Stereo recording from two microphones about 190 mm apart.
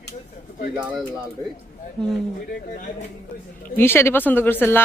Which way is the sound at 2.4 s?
45° left (ahead or behind).